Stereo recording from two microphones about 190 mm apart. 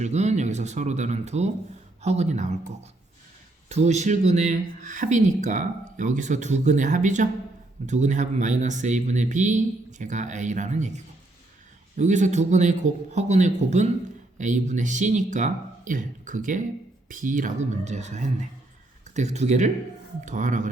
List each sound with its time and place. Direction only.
0.0 s speech: 35° right (ahead or behind)
3.7 s speech: 35° right (ahead or behind)